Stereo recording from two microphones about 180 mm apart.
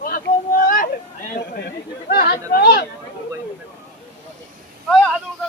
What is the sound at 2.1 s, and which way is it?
Speech, 60° left (ahead or behind).